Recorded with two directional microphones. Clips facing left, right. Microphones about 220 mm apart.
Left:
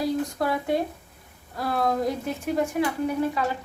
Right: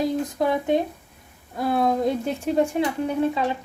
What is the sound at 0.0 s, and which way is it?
Speech, 20° right (ahead or behind).